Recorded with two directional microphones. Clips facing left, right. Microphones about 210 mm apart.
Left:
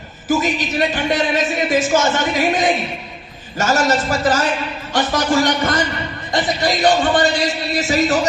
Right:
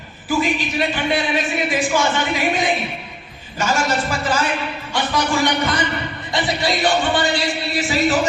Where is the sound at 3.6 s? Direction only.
45° left (ahead or behind).